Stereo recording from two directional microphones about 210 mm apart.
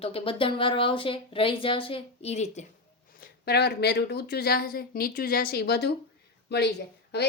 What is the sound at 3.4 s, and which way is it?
A woman's voice, 50° left (ahead or behind).